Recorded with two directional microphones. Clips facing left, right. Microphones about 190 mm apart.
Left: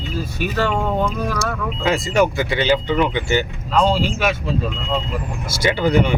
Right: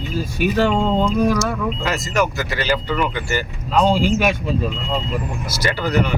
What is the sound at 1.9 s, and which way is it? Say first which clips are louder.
Speech: left 6 dB; 30° left (ahead or behind).